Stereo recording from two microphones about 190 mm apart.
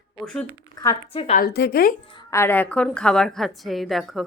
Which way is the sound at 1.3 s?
55° left (ahead or behind).